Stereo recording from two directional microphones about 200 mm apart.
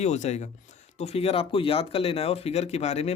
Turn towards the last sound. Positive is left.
turn(degrees=35)  # may be behind; listen again after turning